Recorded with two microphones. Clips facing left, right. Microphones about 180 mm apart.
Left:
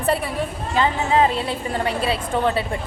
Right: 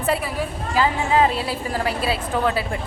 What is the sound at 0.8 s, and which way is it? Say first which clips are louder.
A woman's voice: even; 30° left (ahead or behind).